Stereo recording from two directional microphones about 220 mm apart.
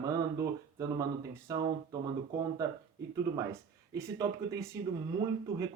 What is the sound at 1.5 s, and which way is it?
Speech, 15° right (ahead or behind).